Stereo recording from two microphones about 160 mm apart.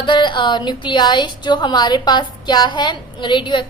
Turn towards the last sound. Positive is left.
turn(degrees=30)  # may be behind; listen again after turning